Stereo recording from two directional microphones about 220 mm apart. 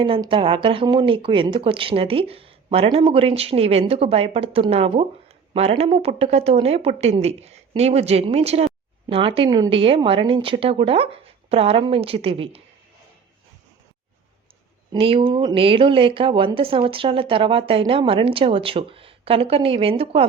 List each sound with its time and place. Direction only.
0.0 s speech: 25° right (ahead or behind)
14.9 s speech: 25° right (ahead or behind)